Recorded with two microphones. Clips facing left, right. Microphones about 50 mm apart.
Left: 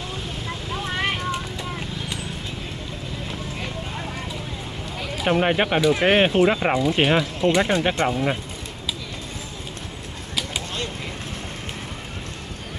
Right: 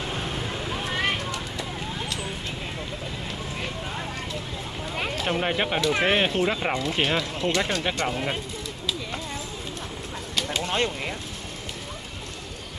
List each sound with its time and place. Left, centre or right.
1.3 s vehicle: centre
5.1 s speech: centre
8.1 s speech: centre